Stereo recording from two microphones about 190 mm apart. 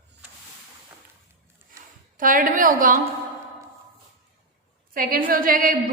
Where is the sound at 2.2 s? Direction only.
45° right (ahead or behind).